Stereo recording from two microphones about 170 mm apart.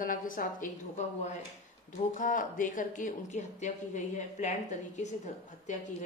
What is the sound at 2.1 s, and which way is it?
Speech, 50° left (ahead or behind).